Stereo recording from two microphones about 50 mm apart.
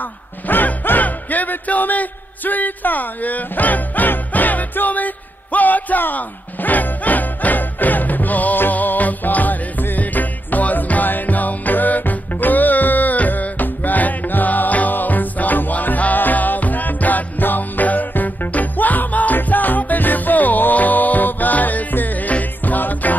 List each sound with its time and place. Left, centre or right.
0.0 s music: left